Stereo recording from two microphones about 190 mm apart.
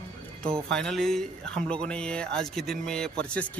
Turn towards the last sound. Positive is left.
turn(degrees=5)  # may be behind; listen again after turning